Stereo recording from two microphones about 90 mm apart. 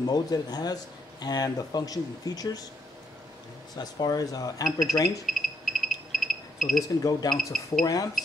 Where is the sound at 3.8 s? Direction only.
45° left (ahead or behind).